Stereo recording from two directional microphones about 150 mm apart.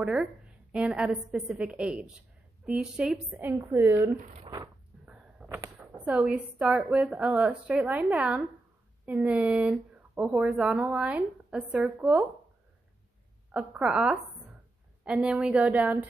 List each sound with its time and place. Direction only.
0.0 s a woman's voice: 5° right (ahead or behind)
3.3 s speech: 15° right (ahead or behind)
4.2 s speech: 45° right (ahead or behind)
5.0 s a sound: 5° right (ahead or behind)
5.6 s speech: 10° right (ahead or behind)
13.5 s speech: 5° right (ahead or behind)